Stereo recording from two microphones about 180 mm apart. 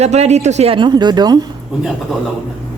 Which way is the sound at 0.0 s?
35° right (ahead or behind).